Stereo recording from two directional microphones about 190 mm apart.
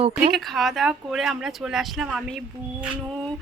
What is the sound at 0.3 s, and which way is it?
A woman's voice, centre (ahead or behind).